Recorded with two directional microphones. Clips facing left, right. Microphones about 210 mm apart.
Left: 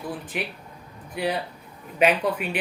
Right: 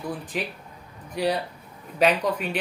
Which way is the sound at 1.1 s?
5° left (ahead or behind).